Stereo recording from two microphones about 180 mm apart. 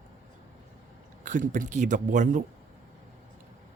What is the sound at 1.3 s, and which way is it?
A man's voice, 45° right (ahead or behind).